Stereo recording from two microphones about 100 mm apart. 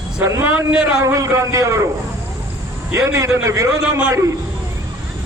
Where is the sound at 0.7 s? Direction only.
5° right (ahead or behind).